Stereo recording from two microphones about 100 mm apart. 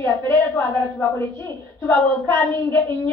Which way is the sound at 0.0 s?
20° left (ahead or behind).